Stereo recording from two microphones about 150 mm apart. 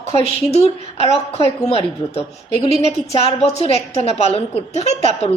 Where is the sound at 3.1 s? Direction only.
45° left (ahead or behind).